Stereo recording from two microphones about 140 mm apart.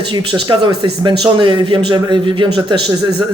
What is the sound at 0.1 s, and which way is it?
Speech, 35° right (ahead or behind).